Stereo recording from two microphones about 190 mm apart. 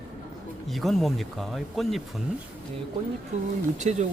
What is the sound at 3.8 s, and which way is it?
Speech, 40° right (ahead or behind).